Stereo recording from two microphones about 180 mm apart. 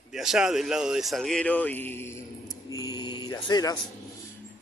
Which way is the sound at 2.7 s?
20° left (ahead or behind).